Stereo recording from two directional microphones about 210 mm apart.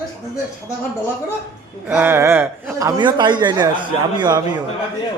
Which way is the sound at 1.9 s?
10° right (ahead or behind).